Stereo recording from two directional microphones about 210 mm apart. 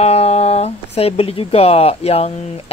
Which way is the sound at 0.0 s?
30° left (ahead or behind).